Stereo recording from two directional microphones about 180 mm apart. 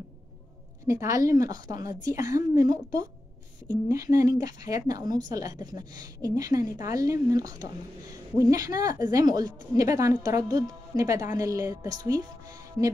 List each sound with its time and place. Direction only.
0.8 s a woman's voice: 15° right (ahead or behind)